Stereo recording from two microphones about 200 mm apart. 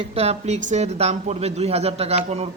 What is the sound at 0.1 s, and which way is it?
A man's voice, 30° right (ahead or behind).